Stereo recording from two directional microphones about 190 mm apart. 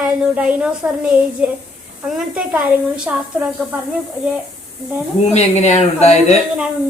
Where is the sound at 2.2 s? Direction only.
5° right (ahead or behind).